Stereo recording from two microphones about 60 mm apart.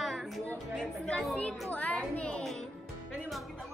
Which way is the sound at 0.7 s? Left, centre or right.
Centre.